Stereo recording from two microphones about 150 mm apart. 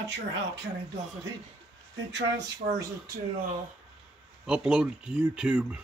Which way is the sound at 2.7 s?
90° right.